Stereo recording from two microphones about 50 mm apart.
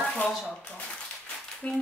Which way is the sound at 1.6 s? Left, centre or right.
Left.